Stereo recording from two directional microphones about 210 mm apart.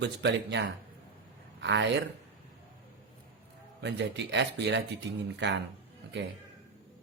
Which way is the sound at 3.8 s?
55° right (ahead or behind).